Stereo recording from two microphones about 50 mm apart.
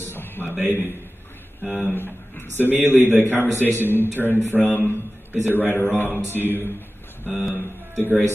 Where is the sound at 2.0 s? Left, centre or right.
Left.